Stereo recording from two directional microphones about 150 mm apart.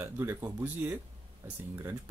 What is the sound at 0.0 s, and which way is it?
Speech, 20° right (ahead or behind).